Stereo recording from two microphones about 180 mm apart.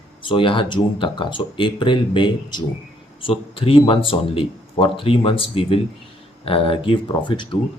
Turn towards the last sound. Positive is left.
turn(degrees=25)  # may be behind; listen again after turning